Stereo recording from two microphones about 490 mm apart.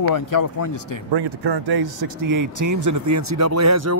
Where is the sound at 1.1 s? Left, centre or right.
Right.